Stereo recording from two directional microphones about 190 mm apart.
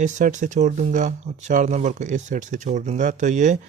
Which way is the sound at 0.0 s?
40° right (ahead or behind).